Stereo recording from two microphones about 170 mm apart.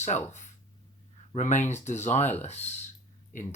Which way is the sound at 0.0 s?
45° left (ahead or behind).